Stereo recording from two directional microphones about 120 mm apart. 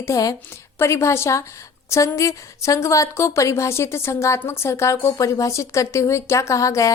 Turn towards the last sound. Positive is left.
turn(degrees=25)  # may be behind; listen again after turning